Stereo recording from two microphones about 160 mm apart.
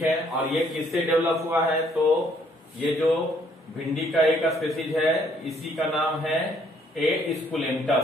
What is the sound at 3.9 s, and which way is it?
A man's voice, centre (ahead or behind).